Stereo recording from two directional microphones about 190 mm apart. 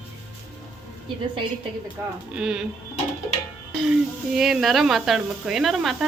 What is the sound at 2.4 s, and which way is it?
Speech, 5° right (ahead or behind).